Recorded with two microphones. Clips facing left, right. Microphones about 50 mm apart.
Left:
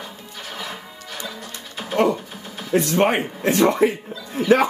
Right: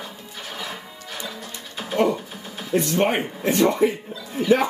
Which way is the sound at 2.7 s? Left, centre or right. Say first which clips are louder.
Left 2 dB; left.